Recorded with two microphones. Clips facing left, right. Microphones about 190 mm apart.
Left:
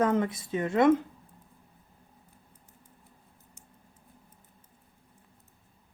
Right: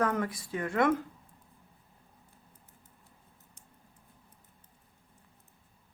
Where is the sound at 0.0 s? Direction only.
20° left (ahead or behind).